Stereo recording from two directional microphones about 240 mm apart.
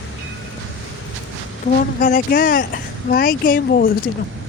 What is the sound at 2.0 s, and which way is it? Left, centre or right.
Speech, left.